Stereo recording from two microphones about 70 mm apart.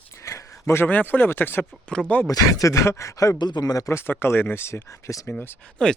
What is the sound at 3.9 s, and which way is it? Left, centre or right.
Speech, left.